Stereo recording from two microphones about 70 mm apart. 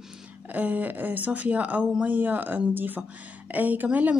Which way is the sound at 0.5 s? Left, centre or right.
Right.